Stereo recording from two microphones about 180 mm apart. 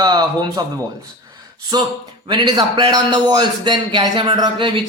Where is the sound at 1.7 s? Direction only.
20° right (ahead or behind).